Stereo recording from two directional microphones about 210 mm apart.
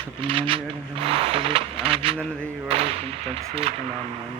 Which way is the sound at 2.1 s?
5° left (ahead or behind).